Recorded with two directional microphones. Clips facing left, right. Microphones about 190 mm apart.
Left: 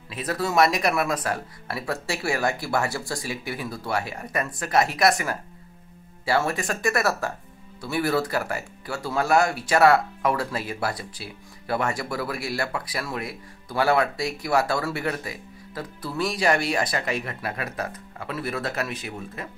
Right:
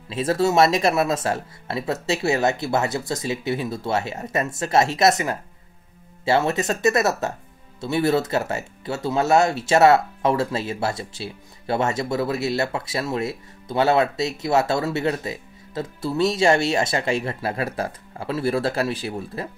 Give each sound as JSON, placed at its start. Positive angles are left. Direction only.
{"t": 0.1, "sound": "speech", "side_deg": -25}